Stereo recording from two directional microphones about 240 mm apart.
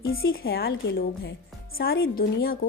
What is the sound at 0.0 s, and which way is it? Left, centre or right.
Speech, left.